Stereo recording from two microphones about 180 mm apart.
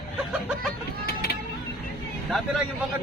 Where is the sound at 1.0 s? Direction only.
60° left (ahead or behind).